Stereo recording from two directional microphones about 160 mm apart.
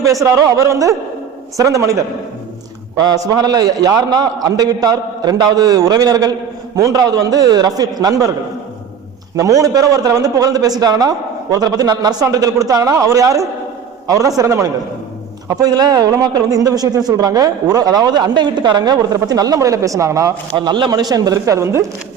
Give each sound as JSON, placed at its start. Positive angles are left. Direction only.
{"t": 0.0, "sound": "a man's voice", "side_deg": -20}
{"t": 9.3, "sound": "speech", "side_deg": -20}